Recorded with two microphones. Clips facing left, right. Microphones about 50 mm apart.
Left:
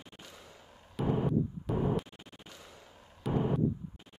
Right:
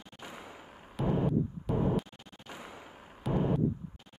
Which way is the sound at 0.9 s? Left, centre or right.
Centre.